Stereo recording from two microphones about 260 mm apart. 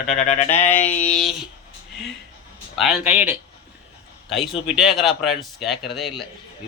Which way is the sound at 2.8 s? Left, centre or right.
Centre.